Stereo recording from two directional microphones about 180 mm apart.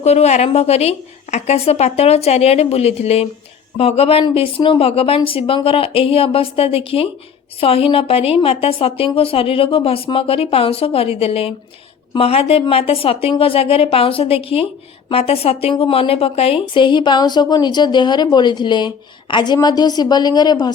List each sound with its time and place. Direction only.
0.0 s a woman's voice: 35° left (ahead or behind)